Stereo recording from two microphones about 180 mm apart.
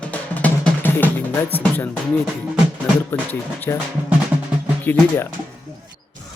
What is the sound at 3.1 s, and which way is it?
Speech, 10° left (ahead or behind).